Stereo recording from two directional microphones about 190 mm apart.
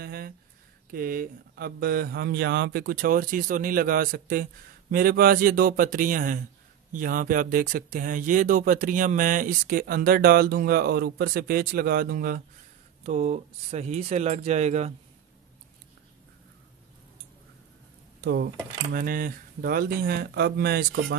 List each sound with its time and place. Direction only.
0.0 s a sound: 55° right (ahead or behind)
0.9 s speech: 50° right (ahead or behind)
13.0 s speech: 35° right (ahead or behind)
18.2 s speech: 60° right (ahead or behind)